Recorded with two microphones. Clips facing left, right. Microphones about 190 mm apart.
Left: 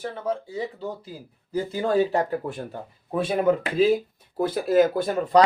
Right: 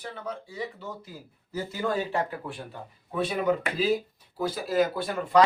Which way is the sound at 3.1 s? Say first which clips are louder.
Left 4 dB; 30° left (ahead or behind).